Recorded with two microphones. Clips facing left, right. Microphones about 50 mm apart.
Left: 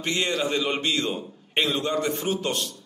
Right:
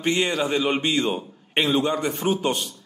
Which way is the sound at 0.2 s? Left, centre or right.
Centre.